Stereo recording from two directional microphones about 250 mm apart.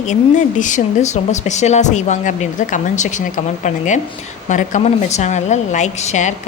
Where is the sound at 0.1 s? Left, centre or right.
Left.